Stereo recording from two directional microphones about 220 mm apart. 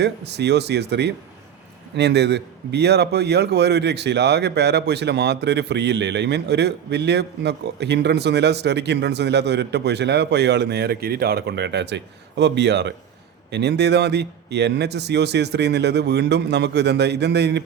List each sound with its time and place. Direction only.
0.0 s a man's voice: 50° right (ahead or behind)